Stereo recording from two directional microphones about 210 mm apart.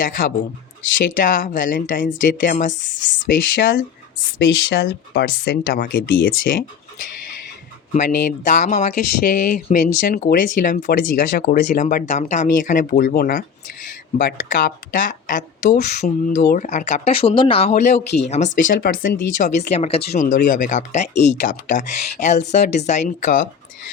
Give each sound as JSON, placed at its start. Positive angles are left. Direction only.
{"t": 0.0, "sound": "speech", "side_deg": 40}
{"t": 3.1, "sound": "speech", "side_deg": 50}
{"t": 7.9, "sound": "speech", "side_deg": 35}
{"t": 20.1, "sound": "speech", "side_deg": 40}